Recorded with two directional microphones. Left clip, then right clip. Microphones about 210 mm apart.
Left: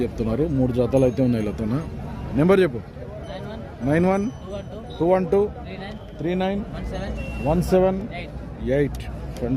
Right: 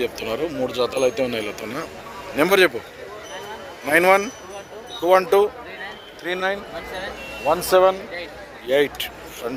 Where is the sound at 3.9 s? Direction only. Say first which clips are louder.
Right 6 dB; 5° right (ahead or behind).